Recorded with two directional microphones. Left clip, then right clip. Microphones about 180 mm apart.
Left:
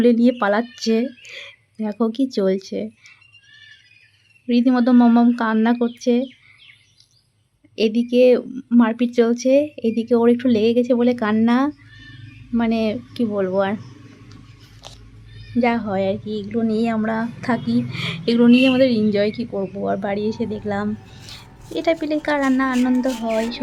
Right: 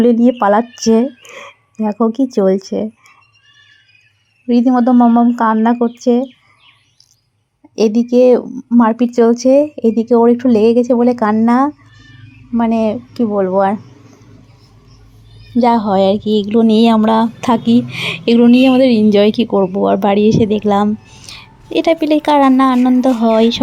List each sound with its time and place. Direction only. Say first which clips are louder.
0.0 s speech: right 5 dB; 10° right (ahead or behind)
1.4 s speech: right 9 dB; centre (ahead or behind)
4.4 s speech: right 5 dB; 10° right (ahead or behind)
4.7 s speech: right 5 dB; 5° left (ahead or behind)
7.8 s speech: right 5 dB; 15° right (ahead or behind)
15.5 s a woman's voice: right 8 dB; 25° right (ahead or behind)